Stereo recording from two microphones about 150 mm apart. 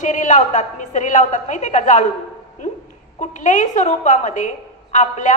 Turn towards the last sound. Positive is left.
turn(degrees=55)  # may be behind; listen again after turning